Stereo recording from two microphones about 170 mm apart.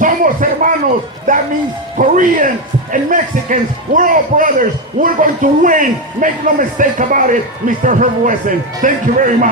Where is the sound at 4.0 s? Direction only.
50° right (ahead or behind).